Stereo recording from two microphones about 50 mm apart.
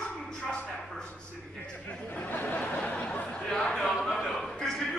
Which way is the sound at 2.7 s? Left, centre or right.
Left.